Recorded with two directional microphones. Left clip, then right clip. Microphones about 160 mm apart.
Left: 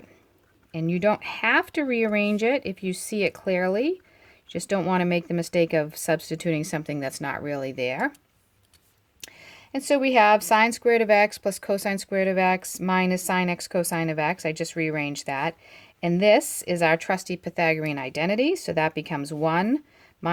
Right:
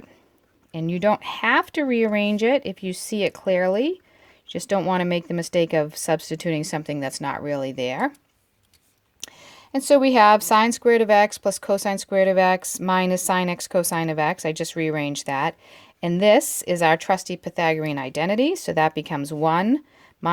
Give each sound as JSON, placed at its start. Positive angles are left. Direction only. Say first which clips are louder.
{"t": 0.7, "sound": "speech", "louder": "right 2 dB", "side_deg": -30}
{"t": 9.2, "sound": "speech", "louder": "right 3 dB", "side_deg": -40}